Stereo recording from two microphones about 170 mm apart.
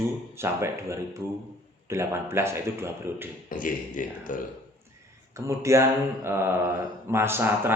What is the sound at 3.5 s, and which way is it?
Speech, 50° left (ahead or behind).